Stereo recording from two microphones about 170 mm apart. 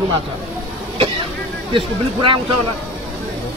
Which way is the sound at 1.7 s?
30° right (ahead or behind).